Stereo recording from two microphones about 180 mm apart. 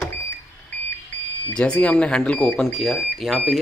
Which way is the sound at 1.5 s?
5° left (ahead or behind).